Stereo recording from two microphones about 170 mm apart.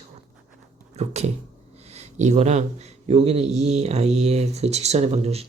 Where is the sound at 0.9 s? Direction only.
40° right (ahead or behind).